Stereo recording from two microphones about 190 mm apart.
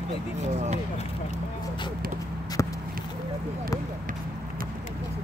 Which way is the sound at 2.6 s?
15° left (ahead or behind).